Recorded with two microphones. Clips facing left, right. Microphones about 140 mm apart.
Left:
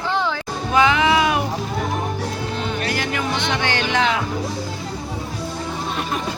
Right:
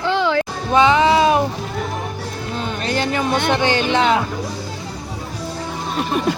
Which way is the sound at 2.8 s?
30° right (ahead or behind).